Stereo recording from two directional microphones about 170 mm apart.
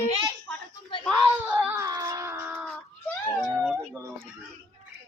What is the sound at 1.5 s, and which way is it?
Baby cry, 10° right (ahead or behind).